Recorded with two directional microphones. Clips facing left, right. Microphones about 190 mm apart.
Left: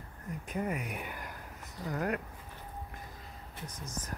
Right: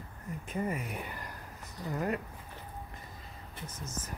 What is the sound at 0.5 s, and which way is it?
Speech, centre (ahead or behind).